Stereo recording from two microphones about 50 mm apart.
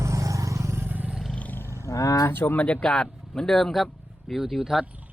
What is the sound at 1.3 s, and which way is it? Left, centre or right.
Roaring cats, left.